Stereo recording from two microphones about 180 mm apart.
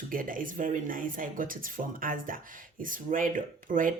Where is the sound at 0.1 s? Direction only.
50° right (ahead or behind).